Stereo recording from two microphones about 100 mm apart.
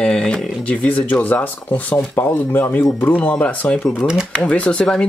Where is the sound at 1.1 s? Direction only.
20° left (ahead or behind).